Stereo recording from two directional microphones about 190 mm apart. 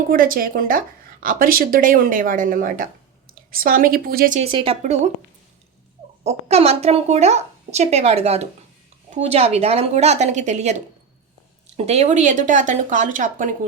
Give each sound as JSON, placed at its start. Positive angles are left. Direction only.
{"t": 0.1, "sound": "a woman's voice", "side_deg": -50}
{"t": 4.4, "sound": "speech", "side_deg": -30}
{"t": 6.2, "sound": "speech", "side_deg": -35}
{"t": 11.8, "sound": "speech", "side_deg": -35}